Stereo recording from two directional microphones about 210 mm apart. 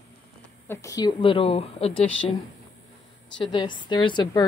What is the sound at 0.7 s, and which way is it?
A woman's voice, 15° left (ahead or behind).